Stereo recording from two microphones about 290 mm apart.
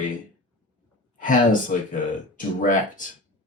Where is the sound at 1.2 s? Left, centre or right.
Left.